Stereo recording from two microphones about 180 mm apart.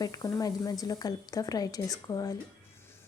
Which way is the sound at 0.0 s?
20° left (ahead or behind).